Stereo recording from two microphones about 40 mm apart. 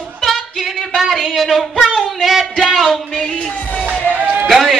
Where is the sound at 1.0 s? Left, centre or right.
Centre.